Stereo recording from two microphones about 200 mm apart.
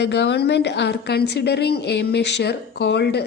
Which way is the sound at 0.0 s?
60° left (ahead or behind).